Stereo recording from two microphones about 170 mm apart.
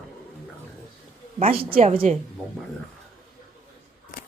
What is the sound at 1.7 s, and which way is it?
Speech, 40° right (ahead or behind).